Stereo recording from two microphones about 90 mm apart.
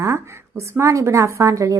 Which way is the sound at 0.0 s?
30° right (ahead or behind).